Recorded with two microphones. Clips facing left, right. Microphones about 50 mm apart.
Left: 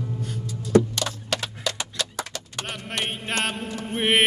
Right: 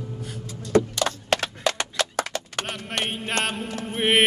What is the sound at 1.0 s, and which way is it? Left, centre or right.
Horse, right.